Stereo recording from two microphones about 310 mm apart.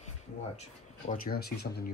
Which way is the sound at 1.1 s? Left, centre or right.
Left.